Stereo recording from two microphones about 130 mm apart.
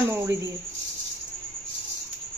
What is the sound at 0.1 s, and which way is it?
Speech, 20° right (ahead or behind).